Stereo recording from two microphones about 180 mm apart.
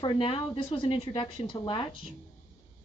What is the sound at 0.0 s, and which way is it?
A woman's voice, 30° left (ahead or behind).